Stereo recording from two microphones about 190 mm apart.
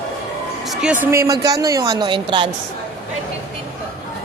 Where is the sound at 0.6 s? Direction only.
Centre (ahead or behind); by 2.5 s 25° right (ahead or behind).